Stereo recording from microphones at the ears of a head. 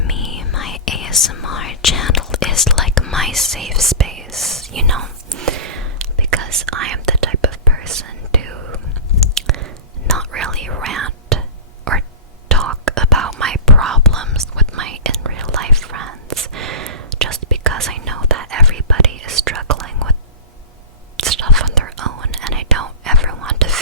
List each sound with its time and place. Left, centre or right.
0.0 s whispering: left
2.9 s whispering: centre
4.7 s whispering: right
10.2 s whispering: right
12.5 s whispering: right
21.2 s whispering: right